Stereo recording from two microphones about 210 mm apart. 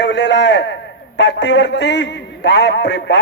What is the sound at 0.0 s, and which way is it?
A man's voice, 55° left (ahead or behind).